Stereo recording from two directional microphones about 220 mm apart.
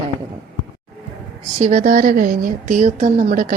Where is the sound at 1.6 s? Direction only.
35° right (ahead or behind).